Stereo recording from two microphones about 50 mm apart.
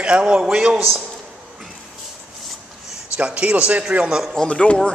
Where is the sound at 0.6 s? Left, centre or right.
Centre.